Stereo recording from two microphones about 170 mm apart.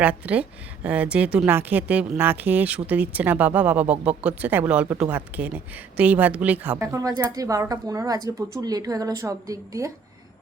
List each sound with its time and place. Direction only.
0.0 s a woman's voice: 10° right (ahead or behind)